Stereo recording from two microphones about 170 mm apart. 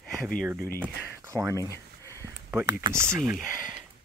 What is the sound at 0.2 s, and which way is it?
Speech, centre (ahead or behind).